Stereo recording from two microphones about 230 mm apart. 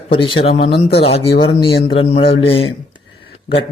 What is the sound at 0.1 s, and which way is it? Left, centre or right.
A man's voice, left.